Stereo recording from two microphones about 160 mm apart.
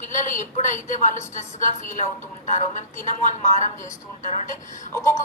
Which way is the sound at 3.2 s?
50° left (ahead or behind).